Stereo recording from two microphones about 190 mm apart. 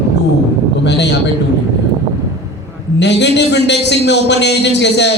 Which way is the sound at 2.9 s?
65° left (ahead or behind).